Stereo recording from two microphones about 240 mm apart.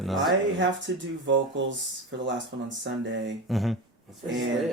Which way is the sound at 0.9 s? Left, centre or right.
Right.